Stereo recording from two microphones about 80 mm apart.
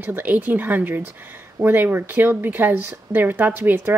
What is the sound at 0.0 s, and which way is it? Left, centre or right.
Speech, right.